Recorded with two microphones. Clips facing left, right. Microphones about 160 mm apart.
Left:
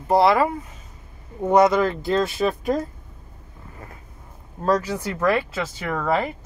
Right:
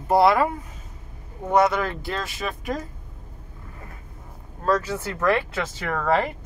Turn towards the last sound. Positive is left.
turn(degrees=10)  # may be behind; listen again after turning